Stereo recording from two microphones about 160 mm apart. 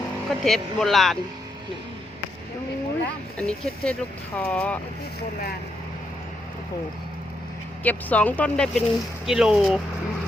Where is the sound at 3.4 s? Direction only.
5° left (ahead or behind).